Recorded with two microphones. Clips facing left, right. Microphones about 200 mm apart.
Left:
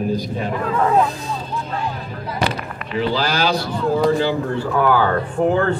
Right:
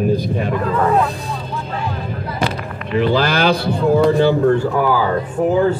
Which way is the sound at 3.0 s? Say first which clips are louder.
Right 4 dB; 60° right (ahead or behind).